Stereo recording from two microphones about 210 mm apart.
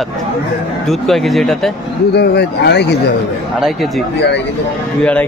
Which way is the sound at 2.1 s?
50° left (ahead or behind).